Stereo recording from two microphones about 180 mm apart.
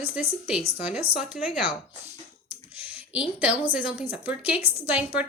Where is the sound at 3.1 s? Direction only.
5° right (ahead or behind).